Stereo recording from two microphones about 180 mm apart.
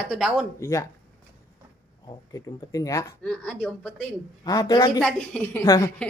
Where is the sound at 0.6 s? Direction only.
15° left (ahead or behind).